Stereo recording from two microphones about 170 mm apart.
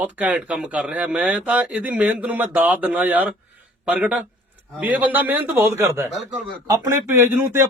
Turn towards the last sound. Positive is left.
turn(degrees=-15)  # may be behind; listen again after turning